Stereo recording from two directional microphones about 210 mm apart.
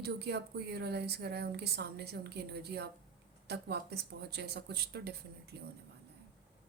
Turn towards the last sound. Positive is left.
turn(degrees=-50)  # may be behind; listen again after turning